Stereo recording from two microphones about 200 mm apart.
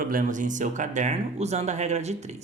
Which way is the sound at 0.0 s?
45° right (ahead or behind).